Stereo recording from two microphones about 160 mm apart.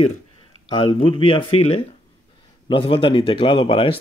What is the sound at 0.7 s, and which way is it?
Speech, 30° left (ahead or behind).